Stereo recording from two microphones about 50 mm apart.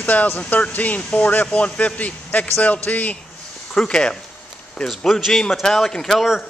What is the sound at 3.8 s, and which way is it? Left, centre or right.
Speech, centre.